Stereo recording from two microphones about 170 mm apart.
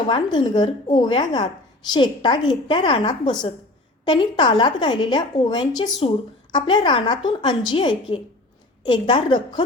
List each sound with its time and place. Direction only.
0.1 s a woman's voice: 30° left (ahead or behind)